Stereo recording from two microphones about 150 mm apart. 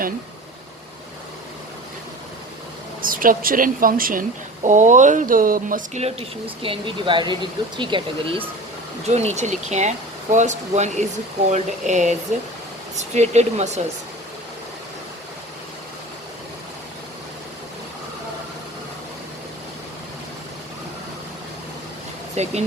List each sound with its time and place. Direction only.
3.0 s a woman's voice: 70° right (ahead or behind)
6.0 s speech: 40° right (ahead or behind)
9.0 s speech: 45° right (ahead or behind)
22.4 s speech: 45° right (ahead or behind)